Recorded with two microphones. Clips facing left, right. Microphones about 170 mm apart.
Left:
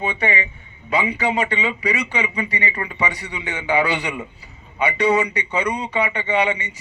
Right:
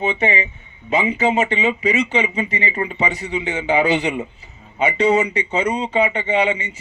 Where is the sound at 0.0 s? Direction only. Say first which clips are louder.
Right 3 dB; 25° right (ahead or behind).